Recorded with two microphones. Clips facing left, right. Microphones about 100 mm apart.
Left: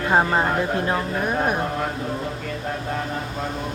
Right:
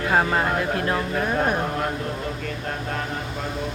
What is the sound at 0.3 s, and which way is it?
Speech, 20° left (ahead or behind).